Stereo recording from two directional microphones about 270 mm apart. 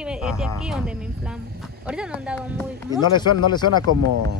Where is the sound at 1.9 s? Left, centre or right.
Centre.